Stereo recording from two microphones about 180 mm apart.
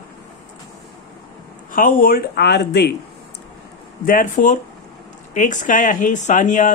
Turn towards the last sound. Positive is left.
turn(degrees=45)  # may be behind; listen again after turning